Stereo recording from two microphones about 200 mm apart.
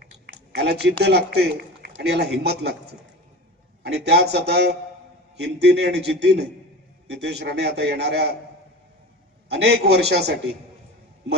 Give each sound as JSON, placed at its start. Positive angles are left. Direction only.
{"t": 0.6, "sound": "a man's voice", "side_deg": -55}
{"t": 9.5, "sound": "a man's voice", "side_deg": -55}